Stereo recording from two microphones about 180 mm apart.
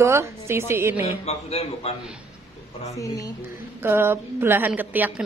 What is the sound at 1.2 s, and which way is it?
Speech, 35° left (ahead or behind).